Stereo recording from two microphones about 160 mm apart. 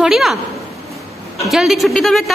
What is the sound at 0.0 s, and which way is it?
Speech, centre (ahead or behind).